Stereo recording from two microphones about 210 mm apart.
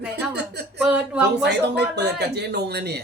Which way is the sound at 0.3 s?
50° right (ahead or behind).